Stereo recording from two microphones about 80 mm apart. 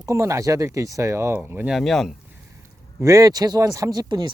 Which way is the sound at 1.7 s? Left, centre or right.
Centre.